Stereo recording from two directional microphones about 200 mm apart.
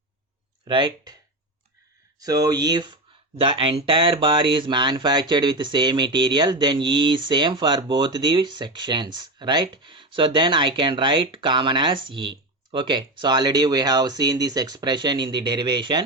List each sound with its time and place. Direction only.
0.7 s speech: 25° right (ahead or behind)
2.1 s speech: 20° right (ahead or behind)